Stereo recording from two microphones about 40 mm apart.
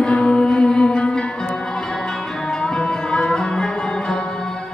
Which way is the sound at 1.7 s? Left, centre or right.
Centre.